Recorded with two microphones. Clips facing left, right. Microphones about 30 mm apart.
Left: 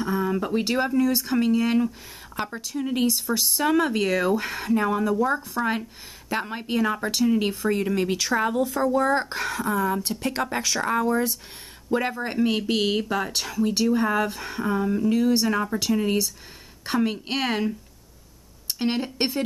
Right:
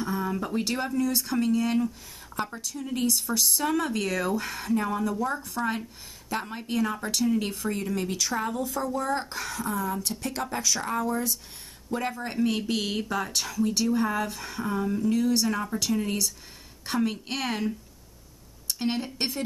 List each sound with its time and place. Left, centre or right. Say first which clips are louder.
0.0 s speech: left 4 dB; centre; by 9.6 s left
9.6 s speech: left 5 dB; centre
9.9 s speech: left 5 dB; left